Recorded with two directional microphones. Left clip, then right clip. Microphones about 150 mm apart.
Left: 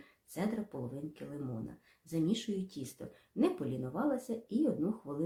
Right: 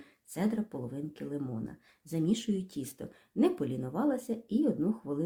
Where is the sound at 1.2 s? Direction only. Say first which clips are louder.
Right 7 dB; 50° right (ahead or behind).